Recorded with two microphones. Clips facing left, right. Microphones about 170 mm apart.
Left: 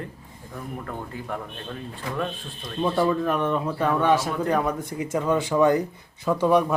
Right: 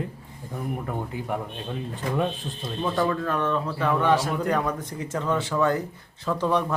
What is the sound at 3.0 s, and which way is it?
Speech, 15° left (ahead or behind).